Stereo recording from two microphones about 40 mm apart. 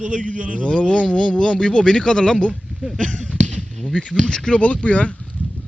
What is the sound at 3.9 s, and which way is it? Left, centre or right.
Speech, left.